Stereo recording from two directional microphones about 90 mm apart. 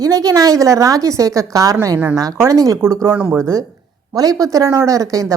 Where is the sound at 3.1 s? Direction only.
20° right (ahead or behind).